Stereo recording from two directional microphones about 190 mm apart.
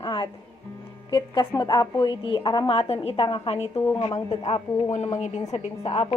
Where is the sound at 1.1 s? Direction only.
20° left (ahead or behind).